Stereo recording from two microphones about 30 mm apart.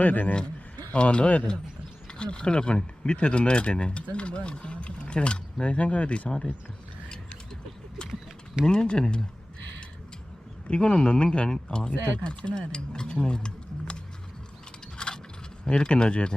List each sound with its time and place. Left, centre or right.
0.0 s speech: left
0.9 s speech: left
8.7 s speech: left
10.8 s speech: left
14.9 s a sound: left
15.6 s speech: left